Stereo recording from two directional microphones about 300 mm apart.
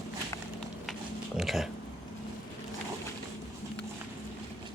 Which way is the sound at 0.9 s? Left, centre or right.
Centre.